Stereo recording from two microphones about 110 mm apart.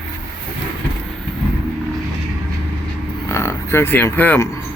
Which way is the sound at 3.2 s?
25° left (ahead or behind).